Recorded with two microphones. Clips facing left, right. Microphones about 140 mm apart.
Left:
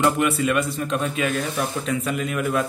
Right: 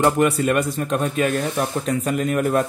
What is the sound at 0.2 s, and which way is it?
A man's voice, 45° right (ahead or behind).